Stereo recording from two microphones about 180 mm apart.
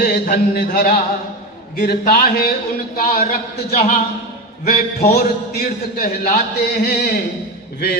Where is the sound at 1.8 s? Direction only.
60° left (ahead or behind).